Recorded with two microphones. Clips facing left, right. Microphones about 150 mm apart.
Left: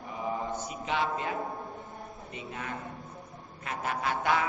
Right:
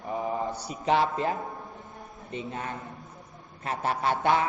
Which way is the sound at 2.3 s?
35° right (ahead or behind).